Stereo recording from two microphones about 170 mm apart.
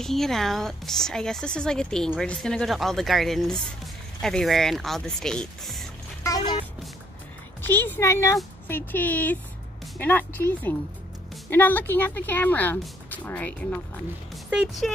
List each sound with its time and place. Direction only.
0.0 s a woman's voice: centre (ahead or behind)
6.2 s speech: 25° left (ahead or behind)
7.6 s a woman's voice: 10° left (ahead or behind)
11.5 s a woman's voice: 10° left (ahead or behind)
14.3 s speech: 5° right (ahead or behind)